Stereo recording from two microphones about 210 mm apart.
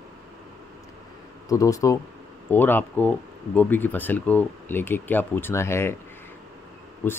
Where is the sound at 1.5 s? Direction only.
15° left (ahead or behind).